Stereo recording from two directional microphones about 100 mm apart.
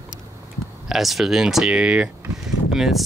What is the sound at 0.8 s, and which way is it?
Speech, centre (ahead or behind).